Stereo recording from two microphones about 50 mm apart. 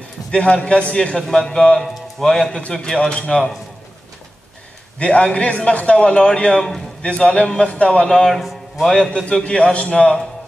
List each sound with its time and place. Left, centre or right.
0.3 s a man's voice: left
3.0 s a man's voice: centre
4.9 s a man's voice: left
8.3 s a man's voice: centre